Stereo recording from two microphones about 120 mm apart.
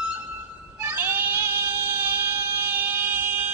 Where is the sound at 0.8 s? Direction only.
20° right (ahead or behind).